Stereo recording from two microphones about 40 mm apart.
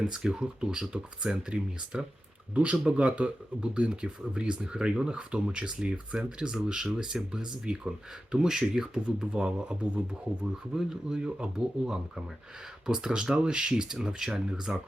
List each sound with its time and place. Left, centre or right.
0.0 s speech: right
9.0 s speech: right
10.8 s speech: centre